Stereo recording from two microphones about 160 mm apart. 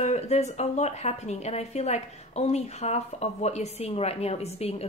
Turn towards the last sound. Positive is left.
turn(degrees=40)  # may be behind; listen again after turning